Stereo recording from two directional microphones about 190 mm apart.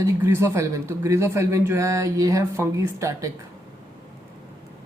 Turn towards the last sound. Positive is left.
turn(degrees=-15)  # may be behind; listen again after turning